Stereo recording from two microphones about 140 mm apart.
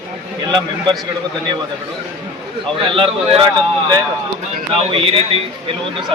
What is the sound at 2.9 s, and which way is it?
Speech, 40° right (ahead or behind).